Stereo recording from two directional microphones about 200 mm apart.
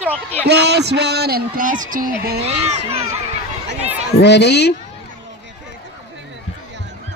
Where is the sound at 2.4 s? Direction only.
30° right (ahead or behind).